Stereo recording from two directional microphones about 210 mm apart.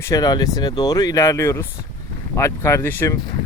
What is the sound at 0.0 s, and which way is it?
Speech, 15° left (ahead or behind).